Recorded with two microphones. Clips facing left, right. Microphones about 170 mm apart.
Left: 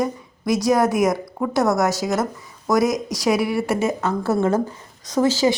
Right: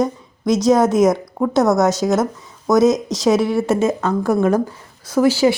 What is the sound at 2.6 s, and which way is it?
A woman's voice, 20° right (ahead or behind).